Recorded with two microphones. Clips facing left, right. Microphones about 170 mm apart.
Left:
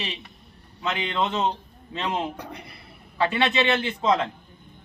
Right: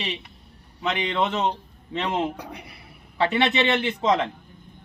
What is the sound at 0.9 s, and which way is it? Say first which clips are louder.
A man's voice: right 2 dB; 20° right (ahead or behind).